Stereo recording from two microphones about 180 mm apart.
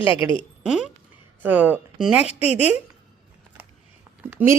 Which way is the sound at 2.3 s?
35° left (ahead or behind).